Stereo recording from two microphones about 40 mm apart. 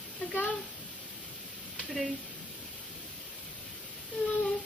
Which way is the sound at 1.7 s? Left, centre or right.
Centre.